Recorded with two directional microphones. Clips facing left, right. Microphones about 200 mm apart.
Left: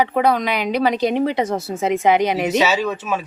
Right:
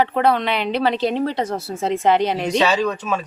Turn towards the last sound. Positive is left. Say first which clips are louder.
# even
turn(degrees=5)  # may be behind; listen again after turning